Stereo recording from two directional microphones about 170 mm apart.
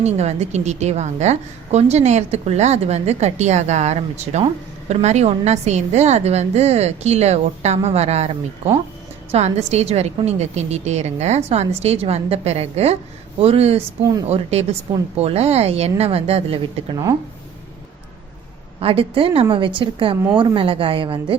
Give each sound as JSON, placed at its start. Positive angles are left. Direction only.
{"t": 0.0, "sound": "a woman's voice", "side_deg": -40}
{"t": 18.8, "sound": "a woman's voice", "side_deg": -35}